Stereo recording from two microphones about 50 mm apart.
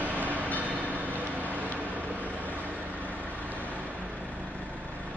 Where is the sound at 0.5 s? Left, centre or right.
Right.